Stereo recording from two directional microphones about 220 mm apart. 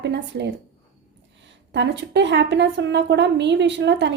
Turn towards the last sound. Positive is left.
turn(degrees=-50)  # may be behind; listen again after turning